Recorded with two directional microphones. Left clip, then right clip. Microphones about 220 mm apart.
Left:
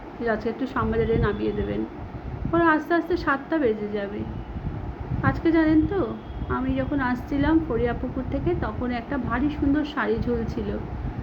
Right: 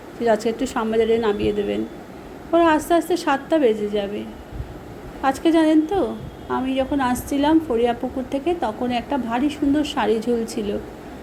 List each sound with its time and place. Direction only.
0.2 s a woman's voice: 20° right (ahead or behind)
5.2 s a woman's voice: 20° right (ahead or behind)